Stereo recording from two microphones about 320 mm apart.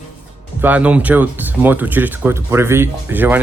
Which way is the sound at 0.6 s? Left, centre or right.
Centre.